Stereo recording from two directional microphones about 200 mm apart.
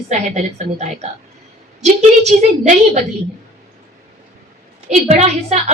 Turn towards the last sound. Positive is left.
turn(degrees=-35)  # may be behind; listen again after turning